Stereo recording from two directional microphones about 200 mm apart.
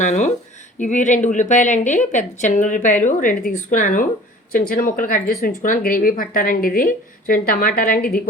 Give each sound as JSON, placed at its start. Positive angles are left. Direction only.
{"t": 0.0, "sound": "a woman's voice", "side_deg": 40}